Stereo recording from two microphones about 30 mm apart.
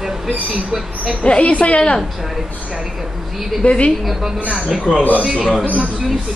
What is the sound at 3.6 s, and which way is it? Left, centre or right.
Speech, left.